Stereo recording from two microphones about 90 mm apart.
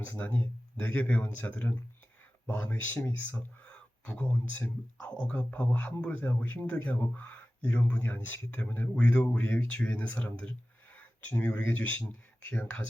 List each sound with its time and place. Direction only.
0.0 s a man's voice: 20° left (ahead or behind)